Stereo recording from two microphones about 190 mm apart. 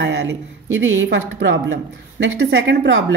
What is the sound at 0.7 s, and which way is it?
A woman's voice, 85° right.